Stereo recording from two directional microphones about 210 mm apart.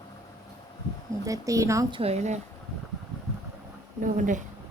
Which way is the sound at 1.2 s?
15° right (ahead or behind).